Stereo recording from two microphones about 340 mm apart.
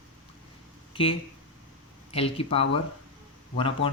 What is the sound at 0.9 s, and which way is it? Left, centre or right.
A man's voice, centre.